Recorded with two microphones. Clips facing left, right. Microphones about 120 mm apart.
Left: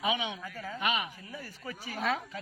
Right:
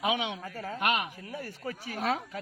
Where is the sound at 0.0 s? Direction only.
70° right (ahead or behind).